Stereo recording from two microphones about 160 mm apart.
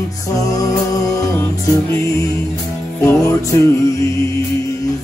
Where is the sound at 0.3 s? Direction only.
20° left (ahead or behind).